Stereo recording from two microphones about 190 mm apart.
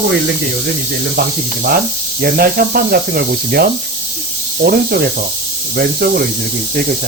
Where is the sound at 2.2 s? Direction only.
50° right (ahead or behind).